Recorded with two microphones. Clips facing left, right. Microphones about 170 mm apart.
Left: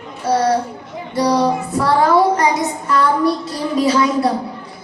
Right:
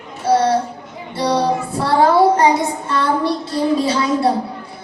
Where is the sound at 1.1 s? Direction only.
30° right (ahead or behind).